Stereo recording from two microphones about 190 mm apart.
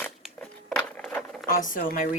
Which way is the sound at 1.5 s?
45° left (ahead or behind).